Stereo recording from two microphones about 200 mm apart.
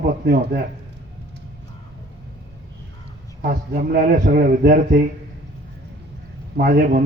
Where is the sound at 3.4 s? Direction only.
50° right (ahead or behind).